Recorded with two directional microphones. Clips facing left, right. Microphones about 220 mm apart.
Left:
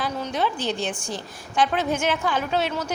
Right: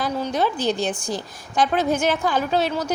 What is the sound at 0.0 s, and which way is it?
A woman's voice, 40° right (ahead or behind).